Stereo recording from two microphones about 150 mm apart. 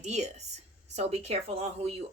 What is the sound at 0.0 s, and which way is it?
A woman's voice, 50° right (ahead or behind).